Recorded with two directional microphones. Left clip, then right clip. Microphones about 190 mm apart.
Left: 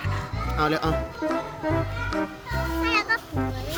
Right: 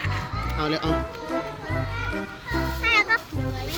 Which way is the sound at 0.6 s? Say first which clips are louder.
Left 3 dB; 15° left (ahead or behind).